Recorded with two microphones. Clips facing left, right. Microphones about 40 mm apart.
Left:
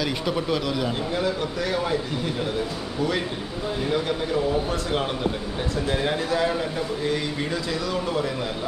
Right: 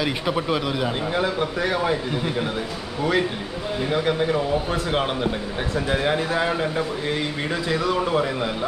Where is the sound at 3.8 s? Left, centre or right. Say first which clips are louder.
Right 4 dB; right.